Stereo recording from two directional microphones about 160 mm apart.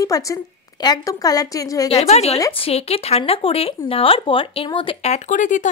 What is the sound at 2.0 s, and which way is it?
A woman's voice, 40° left (ahead or behind).